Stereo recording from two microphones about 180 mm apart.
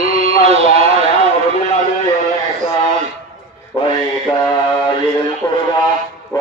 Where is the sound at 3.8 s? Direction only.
25° left (ahead or behind).